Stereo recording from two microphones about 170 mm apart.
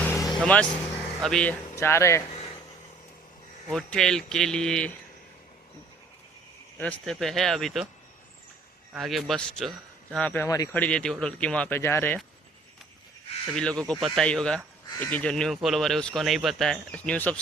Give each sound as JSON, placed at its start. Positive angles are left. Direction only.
{"t": 0.0, "sound": "vehicle", "side_deg": 15}
{"t": 0.3, "sound": "speech", "side_deg": 5}
{"t": 1.7, "sound": "a man's voice", "side_deg": 15}
{"t": 3.7, "sound": "speech", "side_deg": 5}
{"t": 7.0, "sound": "speech", "side_deg": 0}
{"t": 8.9, "sound": "speech", "side_deg": 0}
{"t": 10.8, "sound": "a man's voice", "side_deg": 5}
{"t": 13.6, "sound": "speech", "side_deg": 5}